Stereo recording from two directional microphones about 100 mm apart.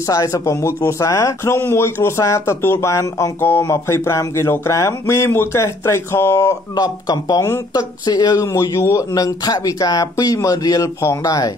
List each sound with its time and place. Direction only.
0.1 s speech: 30° left (ahead or behind)
6.7 s speech: 40° left (ahead or behind)
7.4 s speech: 25° left (ahead or behind)
8.0 s speech: 40° left (ahead or behind)